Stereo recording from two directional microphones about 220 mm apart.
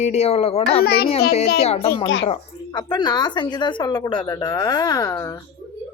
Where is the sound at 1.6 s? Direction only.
30° left (ahead or behind).